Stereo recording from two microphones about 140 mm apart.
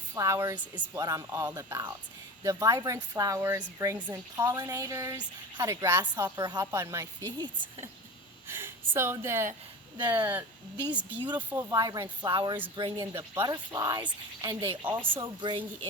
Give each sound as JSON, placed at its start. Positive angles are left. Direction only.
{"t": 0.2, "sound": "speech", "side_deg": -20}
{"t": 8.4, "sound": "a woman's voice", "side_deg": -15}
{"t": 11.7, "sound": "a woman's voice", "side_deg": -25}
{"t": 13.1, "sound": "speech", "side_deg": -20}
{"t": 14.5, "sound": "speech", "side_deg": -15}
{"t": 15.2, "sound": "a woman's voice", "side_deg": -35}